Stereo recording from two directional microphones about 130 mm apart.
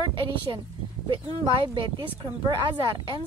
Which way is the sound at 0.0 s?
40° right (ahead or behind).